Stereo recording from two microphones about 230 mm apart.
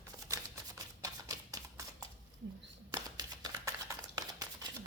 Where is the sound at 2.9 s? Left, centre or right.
Centre.